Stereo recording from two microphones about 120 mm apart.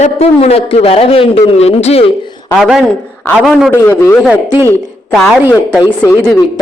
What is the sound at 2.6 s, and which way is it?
Speech, 5° right (ahead or behind).